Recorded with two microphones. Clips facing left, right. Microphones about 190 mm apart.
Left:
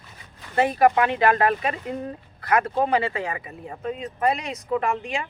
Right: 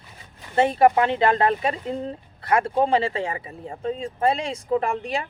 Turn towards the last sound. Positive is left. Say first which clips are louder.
# right 1 dB
turn(degrees=-35)  # may be behind; listen again after turning